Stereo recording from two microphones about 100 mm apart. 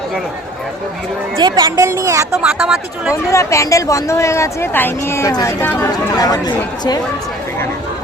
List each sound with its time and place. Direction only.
1.4 s a woman's voice: 45° right (ahead or behind)
2.4 s speech: 5° right (ahead or behind)
3.2 s speech: 30° left (ahead or behind)